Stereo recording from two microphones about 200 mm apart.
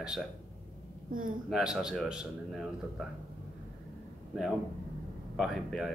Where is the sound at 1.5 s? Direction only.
5° right (ahead or behind).